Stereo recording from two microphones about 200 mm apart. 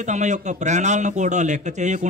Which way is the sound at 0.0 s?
35° right (ahead or behind).